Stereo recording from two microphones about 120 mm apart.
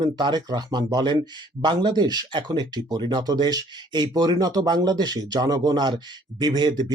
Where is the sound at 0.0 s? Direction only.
35° right (ahead or behind).